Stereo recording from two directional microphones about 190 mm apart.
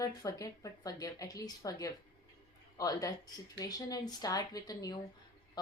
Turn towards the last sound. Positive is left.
turn(degrees=20)  # may be behind; listen again after turning